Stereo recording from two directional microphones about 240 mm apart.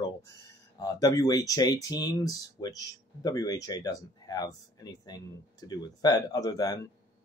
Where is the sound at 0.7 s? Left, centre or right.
Centre.